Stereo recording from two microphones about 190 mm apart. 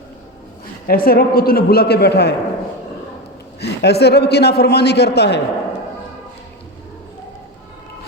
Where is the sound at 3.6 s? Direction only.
60° left (ahead or behind).